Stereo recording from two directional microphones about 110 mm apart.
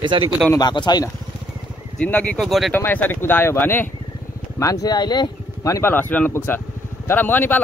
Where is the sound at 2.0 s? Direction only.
15° left (ahead or behind).